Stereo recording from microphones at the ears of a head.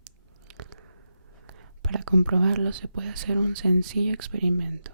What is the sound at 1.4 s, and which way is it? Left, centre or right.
Whispering, right.